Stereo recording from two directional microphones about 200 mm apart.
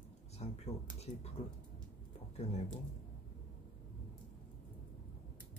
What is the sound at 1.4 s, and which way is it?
Speech, 30° left (ahead or behind).